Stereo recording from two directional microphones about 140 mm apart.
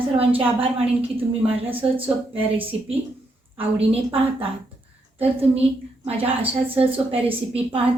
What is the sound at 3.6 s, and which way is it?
Speech, 45° right (ahead or behind).